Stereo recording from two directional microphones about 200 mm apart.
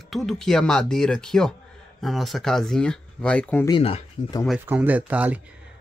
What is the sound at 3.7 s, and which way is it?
Speech, 25° left (ahead or behind).